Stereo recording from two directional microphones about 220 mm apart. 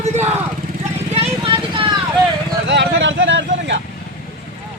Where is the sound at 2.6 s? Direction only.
55° right (ahead or behind).